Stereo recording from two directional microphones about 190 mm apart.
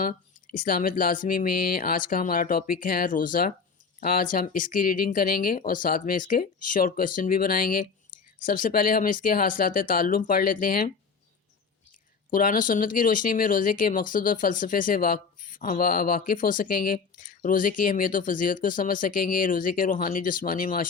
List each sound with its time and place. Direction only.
0.0 s speech: 45° left (ahead or behind)
12.3 s speech: 45° left (ahead or behind)